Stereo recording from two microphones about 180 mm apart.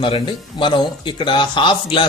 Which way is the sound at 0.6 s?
25° left (ahead or behind).